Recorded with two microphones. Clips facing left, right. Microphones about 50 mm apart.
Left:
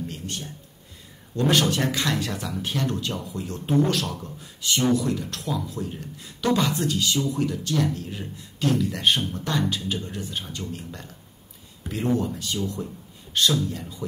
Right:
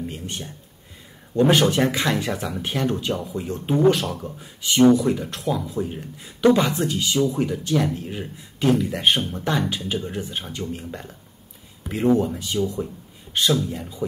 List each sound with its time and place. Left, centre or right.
0.0 s speech: centre